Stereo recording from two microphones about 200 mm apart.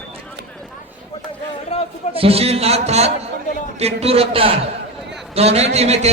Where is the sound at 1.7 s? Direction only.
30° left (ahead or behind).